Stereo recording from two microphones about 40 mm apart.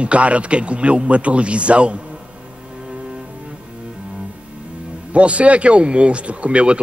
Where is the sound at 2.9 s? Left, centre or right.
Right.